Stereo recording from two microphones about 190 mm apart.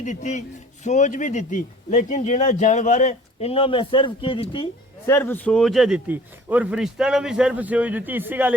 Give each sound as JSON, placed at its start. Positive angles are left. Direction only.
{"t": 0.0, "sound": "speech", "side_deg": 40}
{"t": 5.0, "sound": "speech", "side_deg": 10}